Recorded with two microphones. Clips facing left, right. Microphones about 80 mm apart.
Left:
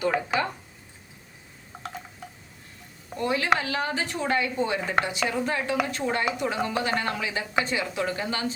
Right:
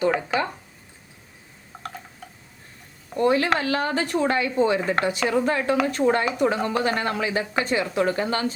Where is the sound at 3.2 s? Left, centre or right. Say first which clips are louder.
Right 7 dB; right.